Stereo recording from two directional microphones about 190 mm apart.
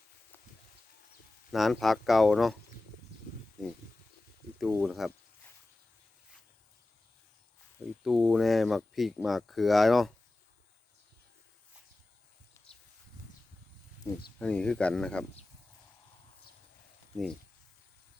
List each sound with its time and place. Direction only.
1.5 s speech: centre (ahead or behind)
3.6 s speech: centre (ahead or behind)
8.0 s speech: centre (ahead or behind)
12.6 s a sound: 15° left (ahead or behind)
14.3 s speech: 5° left (ahead or behind)